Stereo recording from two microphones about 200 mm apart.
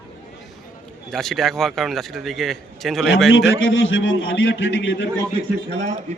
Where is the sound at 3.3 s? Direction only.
70° left (ahead or behind).